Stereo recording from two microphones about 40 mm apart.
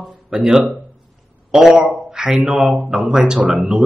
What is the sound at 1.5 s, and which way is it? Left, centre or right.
Speech, centre.